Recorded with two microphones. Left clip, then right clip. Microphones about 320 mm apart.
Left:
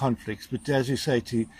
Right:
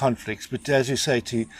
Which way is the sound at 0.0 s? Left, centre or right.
Centre.